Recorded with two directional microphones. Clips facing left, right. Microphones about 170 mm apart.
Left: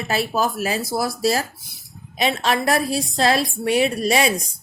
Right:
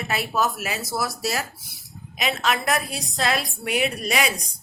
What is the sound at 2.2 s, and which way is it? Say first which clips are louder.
A woman's voice: left 4 dB; 30° left (ahead or behind).